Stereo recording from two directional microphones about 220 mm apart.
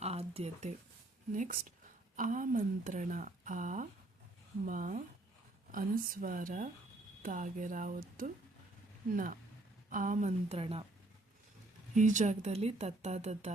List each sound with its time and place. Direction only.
0.0 s speech: 30° right (ahead or behind)
9.9 s speech: 35° right (ahead or behind)
11.9 s speech: 35° right (ahead or behind)